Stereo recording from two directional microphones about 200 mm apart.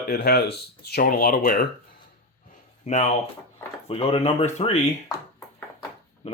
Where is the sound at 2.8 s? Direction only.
30° left (ahead or behind).